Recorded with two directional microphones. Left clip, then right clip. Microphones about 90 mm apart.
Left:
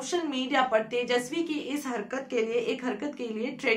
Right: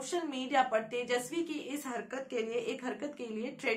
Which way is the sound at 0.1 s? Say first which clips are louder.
Left 4 dB; 25° left (ahead or behind).